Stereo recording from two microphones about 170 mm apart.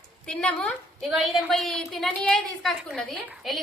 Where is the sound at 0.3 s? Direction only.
5° left (ahead or behind).